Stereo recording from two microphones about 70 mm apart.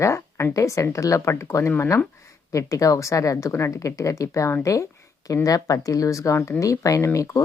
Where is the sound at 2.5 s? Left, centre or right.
Left.